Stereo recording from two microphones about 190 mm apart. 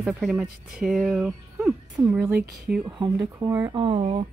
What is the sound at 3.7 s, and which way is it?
Speech, 30° right (ahead or behind).